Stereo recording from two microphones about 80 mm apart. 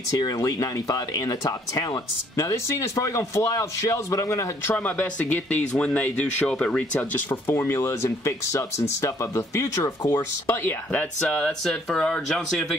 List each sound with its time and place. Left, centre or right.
0.4 s a man's voice: left
2.3 s a man's voice: left
4.7 s speech: centre
10.9 s speech: centre
11.2 s speech: centre